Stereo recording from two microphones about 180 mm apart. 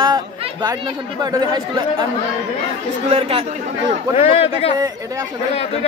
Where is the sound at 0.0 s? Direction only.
25° right (ahead or behind).